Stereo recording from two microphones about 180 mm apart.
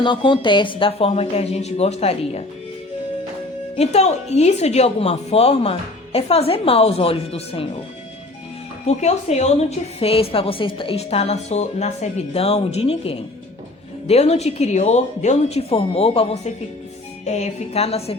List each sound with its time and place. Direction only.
0.0 s a woman's voice: 25° left (ahead or behind)
3.8 s a woman's voice: 35° left (ahead or behind)
8.9 s a woman's voice: 40° left (ahead or behind)